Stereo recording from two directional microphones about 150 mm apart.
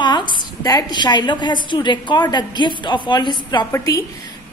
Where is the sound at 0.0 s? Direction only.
30° left (ahead or behind).